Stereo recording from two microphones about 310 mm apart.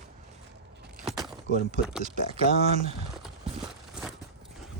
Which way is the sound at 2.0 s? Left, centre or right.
Right.